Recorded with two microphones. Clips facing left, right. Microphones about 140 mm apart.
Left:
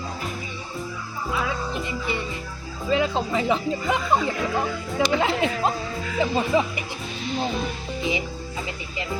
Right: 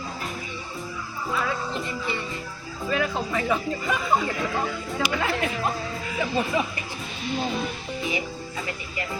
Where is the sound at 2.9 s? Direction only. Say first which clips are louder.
Left 4 dB; 25° left (ahead or behind).